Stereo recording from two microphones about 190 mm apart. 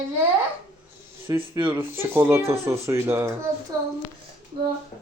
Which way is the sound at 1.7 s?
10° right (ahead or behind).